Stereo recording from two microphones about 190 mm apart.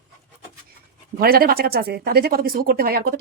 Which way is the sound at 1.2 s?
50° right (ahead or behind).